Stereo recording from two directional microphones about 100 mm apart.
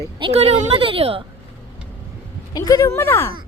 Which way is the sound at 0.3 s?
85° right.